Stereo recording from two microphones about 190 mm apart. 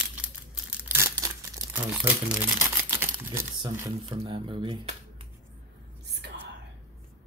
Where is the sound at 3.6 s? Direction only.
25° right (ahead or behind).